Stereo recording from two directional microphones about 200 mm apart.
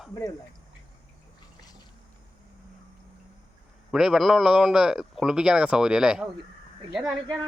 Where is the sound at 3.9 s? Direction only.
Centre (ahead or behind).